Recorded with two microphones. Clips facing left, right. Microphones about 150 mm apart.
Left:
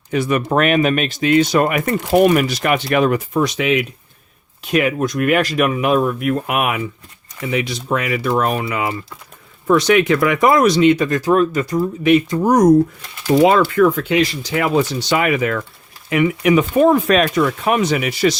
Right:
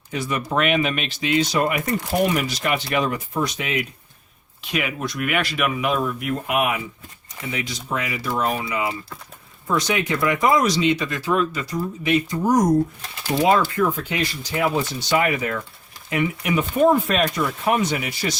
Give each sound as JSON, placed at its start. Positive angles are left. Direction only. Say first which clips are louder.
{"t": 0.1, "sound": "speech", "louder": "left 7 dB", "side_deg": 60}
{"t": 4.7, "sound": "speech", "louder": "left 9 dB", "side_deg": 45}